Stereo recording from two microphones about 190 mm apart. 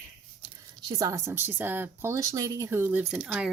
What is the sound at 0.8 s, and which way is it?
Speech, 20° right (ahead or behind).